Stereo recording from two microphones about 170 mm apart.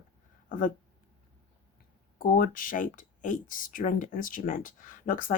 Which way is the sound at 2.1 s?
55° left (ahead or behind).